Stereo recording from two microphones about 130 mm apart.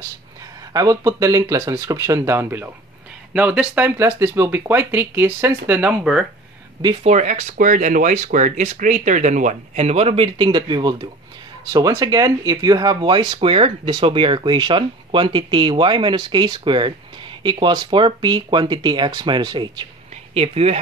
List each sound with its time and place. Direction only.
0.7 s speech: 25° right (ahead or behind); by 6.2 s 5° right (ahead or behind)
7.0 s speech: 60° right (ahead or behind); by 19.9 s 35° right (ahead or behind)
20.3 s speech: 50° right (ahead or behind)